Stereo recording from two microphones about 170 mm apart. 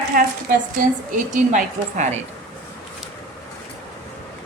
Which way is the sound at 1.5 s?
45° right (ahead or behind).